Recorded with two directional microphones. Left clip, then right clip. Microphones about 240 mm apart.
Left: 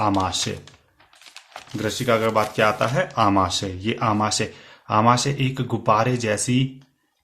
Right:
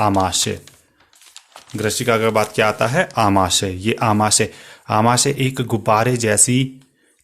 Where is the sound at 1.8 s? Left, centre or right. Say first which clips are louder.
Right 4 dB; right.